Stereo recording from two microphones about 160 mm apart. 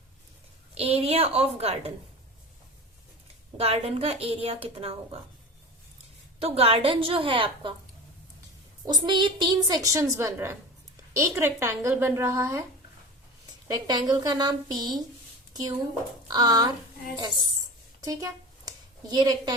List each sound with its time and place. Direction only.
0.7 s a woman's voice: 40° right (ahead or behind)
3.6 s a woman's voice: 40° right (ahead or behind)
6.4 s a woman's voice: 40° right (ahead or behind)
8.8 s a woman's voice: 25° right (ahead or behind)
13.7 s a woman's voice: 25° right (ahead or behind)
16.3 s a woman's voice: 25° right (ahead or behind)
18.0 s a sound: 20° right (ahead or behind)